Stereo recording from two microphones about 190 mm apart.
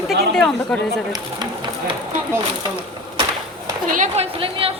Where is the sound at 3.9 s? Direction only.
40° right (ahead or behind).